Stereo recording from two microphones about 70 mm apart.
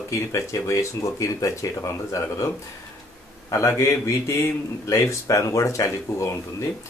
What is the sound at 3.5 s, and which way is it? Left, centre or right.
Speech, left.